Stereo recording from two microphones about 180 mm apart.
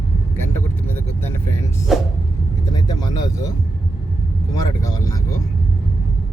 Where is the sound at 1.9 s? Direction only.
Centre (ahead or behind).